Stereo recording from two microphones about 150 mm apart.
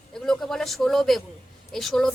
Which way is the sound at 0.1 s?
5° left (ahead or behind).